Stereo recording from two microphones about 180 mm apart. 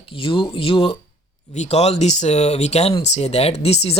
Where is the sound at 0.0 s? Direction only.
30° left (ahead or behind).